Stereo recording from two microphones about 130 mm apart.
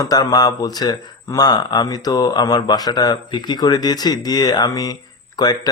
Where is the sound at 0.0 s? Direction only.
30° left (ahead or behind).